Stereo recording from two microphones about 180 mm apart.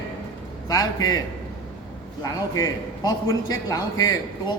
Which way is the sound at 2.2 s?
20° left (ahead or behind).